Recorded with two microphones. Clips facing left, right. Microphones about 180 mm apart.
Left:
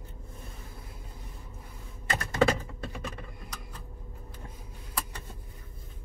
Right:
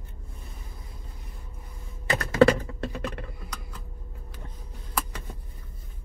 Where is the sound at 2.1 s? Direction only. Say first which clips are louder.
Right 6 dB; 80° right.